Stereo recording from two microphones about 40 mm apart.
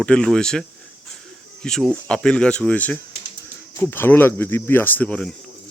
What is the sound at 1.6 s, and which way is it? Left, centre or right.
Speech, centre.